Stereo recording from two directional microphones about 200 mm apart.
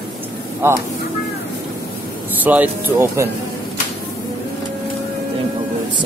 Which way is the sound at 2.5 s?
10° right (ahead or behind).